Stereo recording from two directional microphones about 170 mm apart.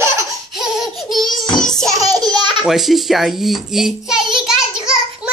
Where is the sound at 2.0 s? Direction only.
20° right (ahead or behind).